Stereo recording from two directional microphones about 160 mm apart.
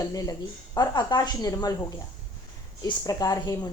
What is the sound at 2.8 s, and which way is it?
Speech, 25° left (ahead or behind).